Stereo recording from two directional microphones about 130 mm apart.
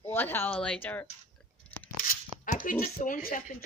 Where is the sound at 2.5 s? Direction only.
90° left.